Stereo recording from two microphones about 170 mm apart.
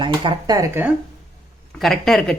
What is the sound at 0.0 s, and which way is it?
Speech, 30° right (ahead or behind).